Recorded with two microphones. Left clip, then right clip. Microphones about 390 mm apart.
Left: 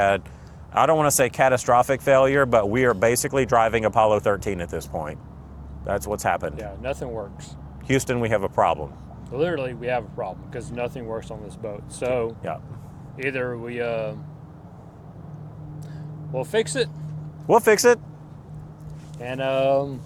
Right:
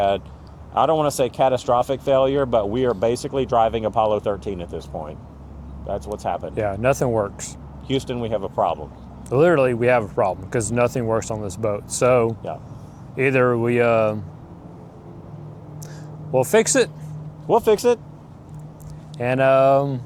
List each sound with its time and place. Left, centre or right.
0.7 s speech: centre
2.4 s speech: left
2.6 s speech: left
6.6 s speech: right
7.9 s speech: left
9.3 s speech: right
13.1 s speech: right
16.3 s speech: right
17.5 s speech: left
19.2 s speech: right